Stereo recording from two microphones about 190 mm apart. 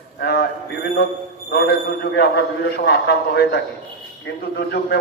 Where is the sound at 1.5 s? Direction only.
55° left (ahead or behind).